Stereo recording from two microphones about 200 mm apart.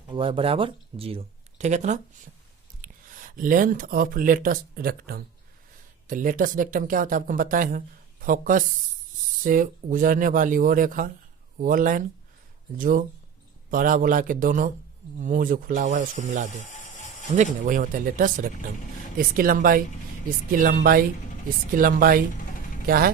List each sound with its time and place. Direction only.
0.1 s speech: 25° right (ahead or behind); by 23.1 s 45° right (ahead or behind)